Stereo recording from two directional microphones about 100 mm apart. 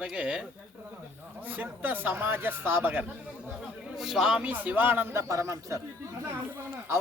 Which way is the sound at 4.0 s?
5° right (ahead or behind).